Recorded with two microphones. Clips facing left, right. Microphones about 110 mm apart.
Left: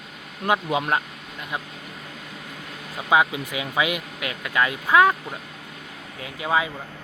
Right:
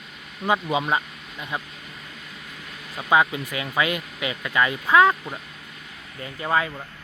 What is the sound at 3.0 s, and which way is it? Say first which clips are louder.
Speech: even; 10° left (ahead or behind).